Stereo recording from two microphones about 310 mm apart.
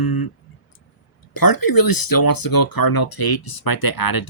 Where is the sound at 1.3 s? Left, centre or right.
Left.